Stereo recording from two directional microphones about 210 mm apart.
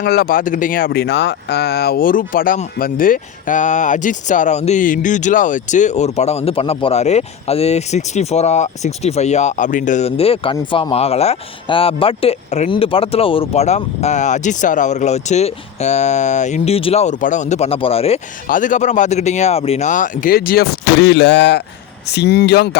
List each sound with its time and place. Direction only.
0.0 s speech: 50° left (ahead or behind); by 18.2 s 30° left (ahead or behind)
18.4 s speech: 40° left (ahead or behind)